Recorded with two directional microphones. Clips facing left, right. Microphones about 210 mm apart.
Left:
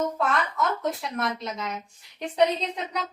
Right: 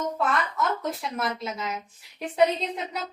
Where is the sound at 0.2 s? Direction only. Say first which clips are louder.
Even; centre (ahead or behind).